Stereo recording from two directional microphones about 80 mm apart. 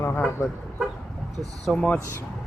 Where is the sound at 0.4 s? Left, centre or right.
Left.